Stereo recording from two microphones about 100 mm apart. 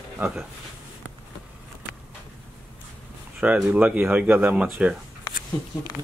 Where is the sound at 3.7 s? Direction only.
15° right (ahead or behind).